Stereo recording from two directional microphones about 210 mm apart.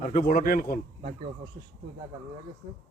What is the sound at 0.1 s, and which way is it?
Speech, 40° left (ahead or behind).